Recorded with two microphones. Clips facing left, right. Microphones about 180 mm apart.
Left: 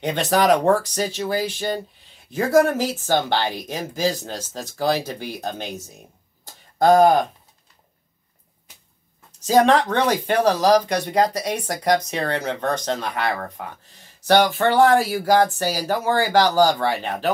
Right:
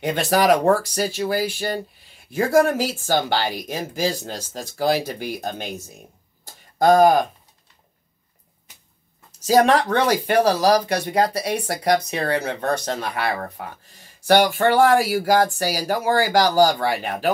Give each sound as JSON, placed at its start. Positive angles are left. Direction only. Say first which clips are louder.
{"t": 0.0, "sound": "speech", "louder": "even", "side_deg": -10}
{"t": 6.9, "sound": "speech", "louder": "even", "side_deg": 20}
{"t": 9.5, "sound": "speech", "louder": "even", "side_deg": -10}